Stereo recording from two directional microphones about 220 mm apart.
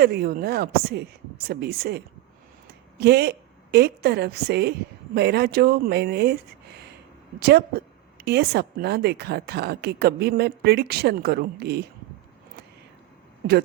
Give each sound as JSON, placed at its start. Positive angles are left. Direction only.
{"t": 0.0, "sound": "speech", "side_deg": -45}
{"t": 3.0, "sound": "a woman's voice", "side_deg": -45}